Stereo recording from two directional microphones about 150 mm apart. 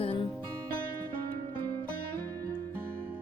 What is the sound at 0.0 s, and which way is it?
Music, 35° left (ahead or behind).